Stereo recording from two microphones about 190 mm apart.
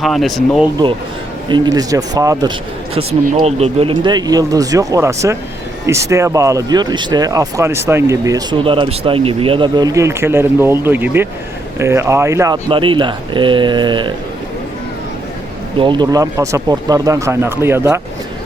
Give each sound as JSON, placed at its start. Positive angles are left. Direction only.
{"t": 0.0, "sound": "speech", "side_deg": 0}
{"t": 1.5, "sound": "speech", "side_deg": -25}
{"t": 2.9, "sound": "speech", "side_deg": -30}
{"t": 15.8, "sound": "speech", "side_deg": -25}